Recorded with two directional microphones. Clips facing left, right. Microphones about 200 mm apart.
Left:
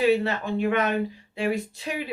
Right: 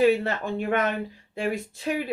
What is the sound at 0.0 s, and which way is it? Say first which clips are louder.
Speech: right 1 dB; 50° right (ahead or behind).